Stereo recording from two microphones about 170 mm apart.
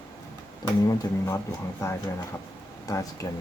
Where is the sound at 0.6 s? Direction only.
20° left (ahead or behind).